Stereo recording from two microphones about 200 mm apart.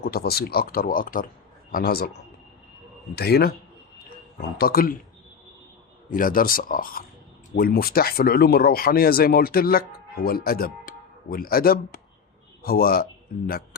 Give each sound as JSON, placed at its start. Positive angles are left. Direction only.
{"t": 0.0, "sound": "speech", "side_deg": 50}
{"t": 3.2, "sound": "speech", "side_deg": 55}
{"t": 6.1, "sound": "speech", "side_deg": 45}